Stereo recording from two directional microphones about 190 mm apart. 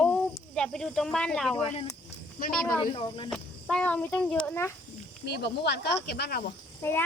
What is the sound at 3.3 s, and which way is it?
Speech, 5° left (ahead or behind).